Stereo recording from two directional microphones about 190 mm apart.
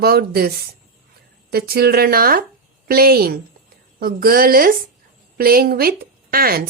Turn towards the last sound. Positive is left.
turn(degrees=-50)  # may be behind; listen again after turning